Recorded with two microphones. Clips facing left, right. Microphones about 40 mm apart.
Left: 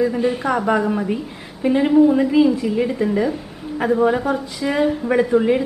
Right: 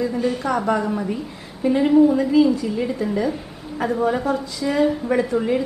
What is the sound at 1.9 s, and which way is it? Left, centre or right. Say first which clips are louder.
A woman's voice: left 1 dB; centre.